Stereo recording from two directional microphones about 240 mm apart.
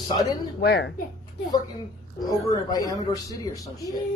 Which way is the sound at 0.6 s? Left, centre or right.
Left.